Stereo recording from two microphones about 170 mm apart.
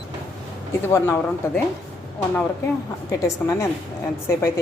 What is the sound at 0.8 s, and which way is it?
Speech, 15° left (ahead or behind).